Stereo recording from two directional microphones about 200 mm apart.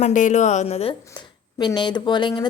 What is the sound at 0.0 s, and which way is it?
A woman's voice, 40° left (ahead or behind).